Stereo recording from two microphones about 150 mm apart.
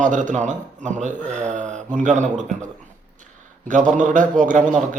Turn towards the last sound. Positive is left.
turn(degrees=-55)  # may be behind; listen again after turning